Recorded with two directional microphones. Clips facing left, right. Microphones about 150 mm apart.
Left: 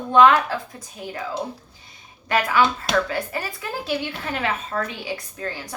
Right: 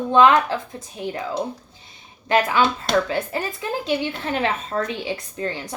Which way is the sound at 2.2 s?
25° right (ahead or behind).